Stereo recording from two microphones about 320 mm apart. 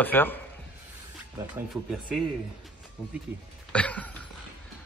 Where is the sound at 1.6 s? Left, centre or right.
Centre.